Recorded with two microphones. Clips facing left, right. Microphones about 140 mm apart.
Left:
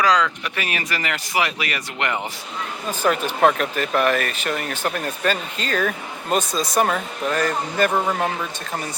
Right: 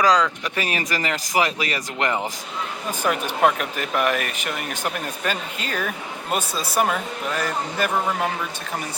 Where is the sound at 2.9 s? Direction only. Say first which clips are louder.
Left 3 dB; 15° right (ahead or behind).